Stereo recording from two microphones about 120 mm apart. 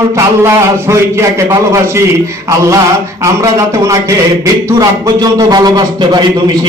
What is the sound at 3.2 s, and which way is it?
A man's voice, 25° right (ahead or behind).